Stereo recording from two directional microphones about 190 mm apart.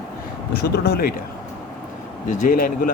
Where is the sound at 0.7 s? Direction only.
55° left (ahead or behind).